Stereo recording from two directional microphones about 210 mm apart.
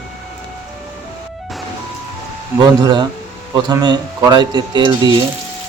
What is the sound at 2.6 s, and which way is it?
Speech, 20° right (ahead or behind).